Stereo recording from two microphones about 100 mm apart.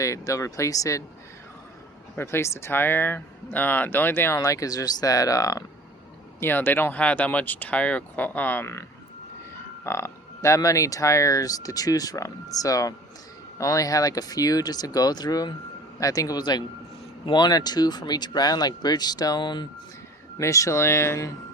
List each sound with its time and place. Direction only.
0.0 s speech: 30° left (ahead or behind)
2.1 s speech: 25° left (ahead or behind)
4.4 s speech: 35° left (ahead or behind)
6.4 s speech: 20° left (ahead or behind)
9.8 s speech: 25° left (ahead or behind); by 19.6 s 50° left (ahead or behind)
20.4 s speech: 30° left (ahead or behind)